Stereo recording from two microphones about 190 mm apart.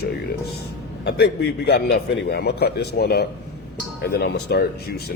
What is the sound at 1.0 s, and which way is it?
Speech, 60° left (ahead or behind).